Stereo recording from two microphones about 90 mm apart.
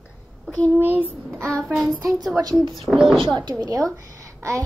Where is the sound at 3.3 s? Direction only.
55° right (ahead or behind).